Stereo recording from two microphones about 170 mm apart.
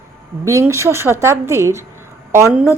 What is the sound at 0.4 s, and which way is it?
Speech, 15° right (ahead or behind).